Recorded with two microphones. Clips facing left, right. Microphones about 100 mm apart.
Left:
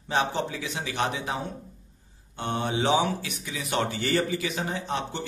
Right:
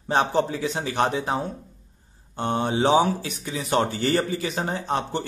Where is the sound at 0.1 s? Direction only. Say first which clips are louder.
Right 5 dB; 40° right (ahead or behind).